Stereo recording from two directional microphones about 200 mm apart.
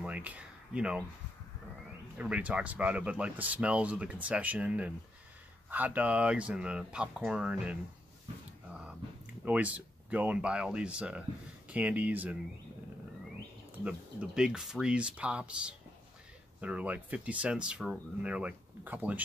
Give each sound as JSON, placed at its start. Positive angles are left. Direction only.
{"t": 0.0, "sound": "speech", "side_deg": -5}
{"t": 2.1, "sound": "speech", "side_deg": -5}
{"t": 9.4, "sound": "speech", "side_deg": -5}
{"t": 13.8, "sound": "speech", "side_deg": -5}